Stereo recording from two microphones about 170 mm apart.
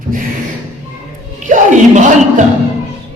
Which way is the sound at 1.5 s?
45° right (ahead or behind).